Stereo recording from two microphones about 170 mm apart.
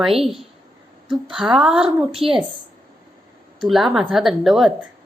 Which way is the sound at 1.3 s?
5° right (ahead or behind).